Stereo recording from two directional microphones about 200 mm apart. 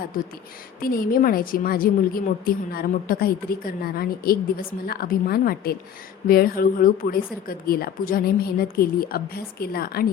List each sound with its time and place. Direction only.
0.8 s a woman's voice: 45° left (ahead or behind)